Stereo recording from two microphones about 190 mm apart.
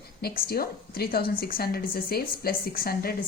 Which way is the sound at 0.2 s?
55° left (ahead or behind).